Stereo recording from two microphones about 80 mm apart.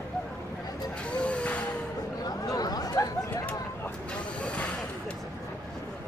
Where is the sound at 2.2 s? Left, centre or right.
Left.